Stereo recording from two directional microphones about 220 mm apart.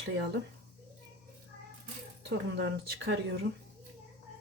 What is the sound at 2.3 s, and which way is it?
Speech, 55° right (ahead or behind).